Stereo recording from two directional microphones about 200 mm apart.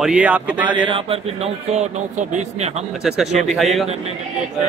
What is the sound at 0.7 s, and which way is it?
A man's voice, 25° right (ahead or behind).